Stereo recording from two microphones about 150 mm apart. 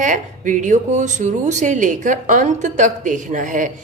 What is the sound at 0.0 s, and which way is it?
Speech, 55° right (ahead or behind).